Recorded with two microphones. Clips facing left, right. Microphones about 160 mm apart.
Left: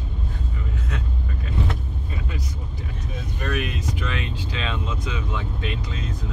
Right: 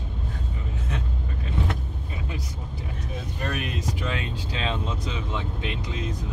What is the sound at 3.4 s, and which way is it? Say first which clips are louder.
Speech: left 3 dB; 35° right (ahead or behind).